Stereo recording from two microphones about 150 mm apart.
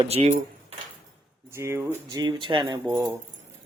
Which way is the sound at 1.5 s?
15° right (ahead or behind).